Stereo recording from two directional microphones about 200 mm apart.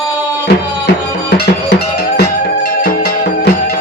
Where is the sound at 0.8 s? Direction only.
55° left (ahead or behind).